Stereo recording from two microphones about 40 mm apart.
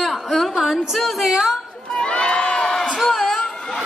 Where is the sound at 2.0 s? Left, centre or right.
Left.